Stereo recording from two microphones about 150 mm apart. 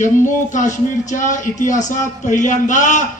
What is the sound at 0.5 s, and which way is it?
Speech, 55° left (ahead or behind).